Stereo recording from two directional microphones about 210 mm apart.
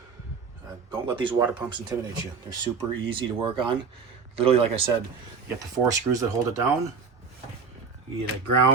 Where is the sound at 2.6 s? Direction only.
25° right (ahead or behind).